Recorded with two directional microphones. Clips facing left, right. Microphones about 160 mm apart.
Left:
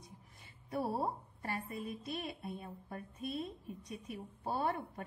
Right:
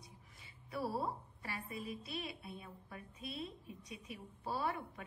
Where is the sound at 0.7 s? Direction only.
45° left (ahead or behind).